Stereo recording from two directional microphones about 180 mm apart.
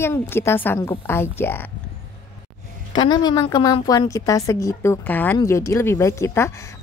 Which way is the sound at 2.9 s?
25° left (ahead or behind).